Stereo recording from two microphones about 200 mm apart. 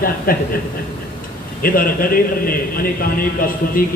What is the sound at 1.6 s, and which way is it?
A man's voice, 45° left (ahead or behind).